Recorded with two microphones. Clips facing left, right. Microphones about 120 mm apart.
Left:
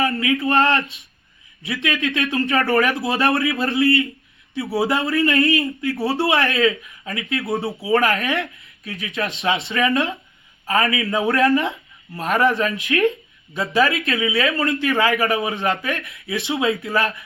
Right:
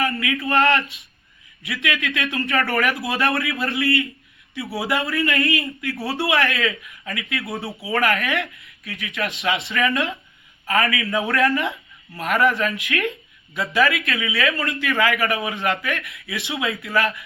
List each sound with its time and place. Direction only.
0.0 s speech: 30° left (ahead or behind)